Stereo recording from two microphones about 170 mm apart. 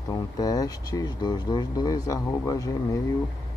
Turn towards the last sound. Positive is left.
turn(degrees=20)  # may be behind; listen again after turning